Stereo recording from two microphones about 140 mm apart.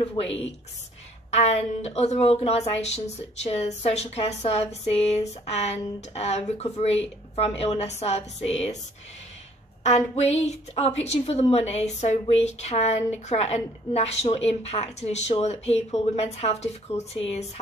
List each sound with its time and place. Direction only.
0.0 s speech: 45° left (ahead or behind)
9.8 s speech: 50° left (ahead or behind)